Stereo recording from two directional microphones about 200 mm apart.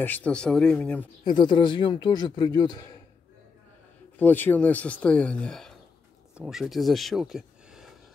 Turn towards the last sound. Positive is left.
turn(degrees=0)  # may be behind; listen again after turning